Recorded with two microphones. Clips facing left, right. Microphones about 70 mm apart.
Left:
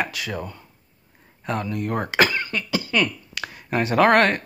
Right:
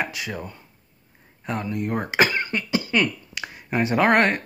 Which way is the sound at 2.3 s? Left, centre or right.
Right.